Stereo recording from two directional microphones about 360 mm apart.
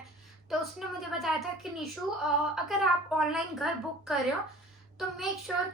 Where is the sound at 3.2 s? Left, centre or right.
Centre.